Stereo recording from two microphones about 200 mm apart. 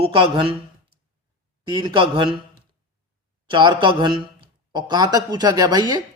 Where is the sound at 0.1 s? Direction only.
25° right (ahead or behind).